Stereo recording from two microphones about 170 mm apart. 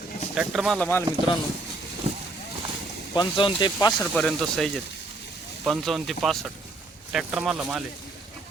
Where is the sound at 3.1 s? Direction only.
25° left (ahead or behind).